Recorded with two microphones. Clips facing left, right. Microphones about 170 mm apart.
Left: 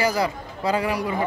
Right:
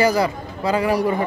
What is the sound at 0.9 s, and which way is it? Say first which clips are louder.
Speech: right 6 dB; 40° right (ahead or behind).